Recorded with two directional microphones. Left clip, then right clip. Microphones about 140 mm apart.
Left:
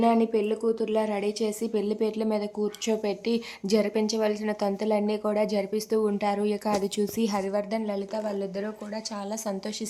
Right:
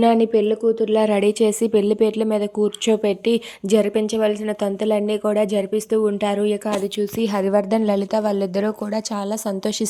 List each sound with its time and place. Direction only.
0.0 s a woman's voice: 40° right (ahead or behind); by 6.7 s 20° right (ahead or behind)
6.8 s speech: 5° right (ahead or behind)
7.5 s speech: 65° right (ahead or behind); by 9.7 s 45° right (ahead or behind)